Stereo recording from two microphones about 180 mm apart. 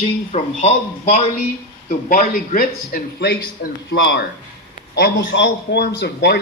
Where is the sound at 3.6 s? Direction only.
70° left (ahead or behind).